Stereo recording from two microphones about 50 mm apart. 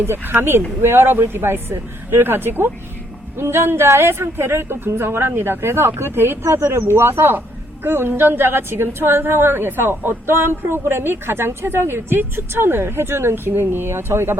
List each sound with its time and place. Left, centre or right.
0.0 s a woman's voice: right